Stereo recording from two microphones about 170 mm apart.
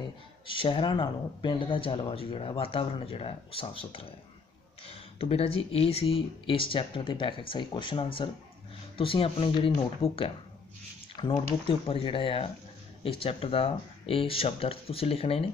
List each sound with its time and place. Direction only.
0.0 s speech: 30° left (ahead or behind)